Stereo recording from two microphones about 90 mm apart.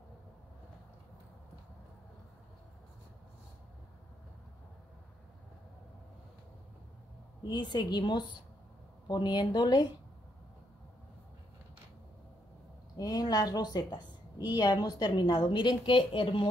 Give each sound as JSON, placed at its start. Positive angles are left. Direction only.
{"t": 7.4, "sound": "a woman's voice", "side_deg": 55}
{"t": 12.9, "sound": "a woman's voice", "side_deg": 45}